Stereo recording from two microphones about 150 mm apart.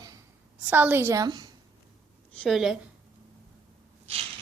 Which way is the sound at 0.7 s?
10° right (ahead or behind).